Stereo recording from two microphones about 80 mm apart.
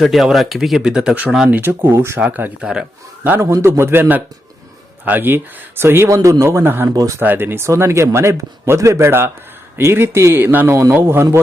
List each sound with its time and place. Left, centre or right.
0.0 s speech: centre
1.5 s a man's voice: right
2.2 s speech: centre
3.4 s a man's voice: right
6.8 s speech: right
7.2 s a man's voice: right
11.0 s speech: right